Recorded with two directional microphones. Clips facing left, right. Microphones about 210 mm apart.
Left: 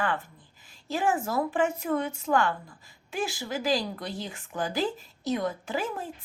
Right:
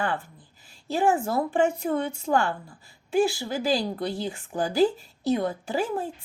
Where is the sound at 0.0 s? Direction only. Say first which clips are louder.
Right 1 dB; 30° right (ahead or behind).